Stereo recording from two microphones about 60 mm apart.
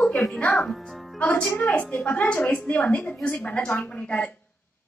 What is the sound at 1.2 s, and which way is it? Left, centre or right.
A woman's voice, left.